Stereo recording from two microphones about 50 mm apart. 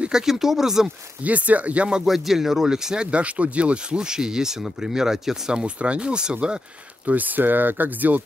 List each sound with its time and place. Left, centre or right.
0.1 s speech: centre
1.2 s speech: right
2.0 s speech: centre
7.1 s speech: right